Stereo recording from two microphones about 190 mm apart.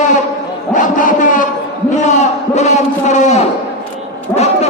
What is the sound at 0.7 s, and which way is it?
A man's voice, 45° left (ahead or behind).